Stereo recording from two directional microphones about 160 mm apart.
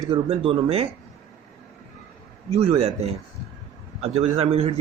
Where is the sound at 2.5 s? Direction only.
40° right (ahead or behind).